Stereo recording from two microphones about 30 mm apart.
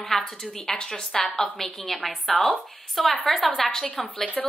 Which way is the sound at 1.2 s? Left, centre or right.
Centre.